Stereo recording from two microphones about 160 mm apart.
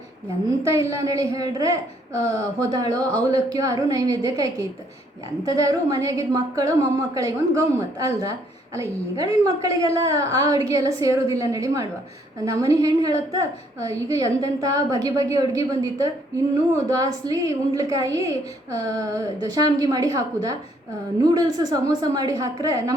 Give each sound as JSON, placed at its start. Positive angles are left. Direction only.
{"t": 0.6, "sound": "a woman's voice", "side_deg": -20}